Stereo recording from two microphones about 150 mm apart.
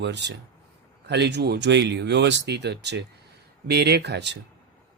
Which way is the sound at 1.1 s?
90° right.